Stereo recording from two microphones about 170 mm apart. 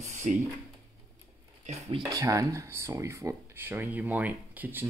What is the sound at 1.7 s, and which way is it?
Speech, 30° right (ahead or behind).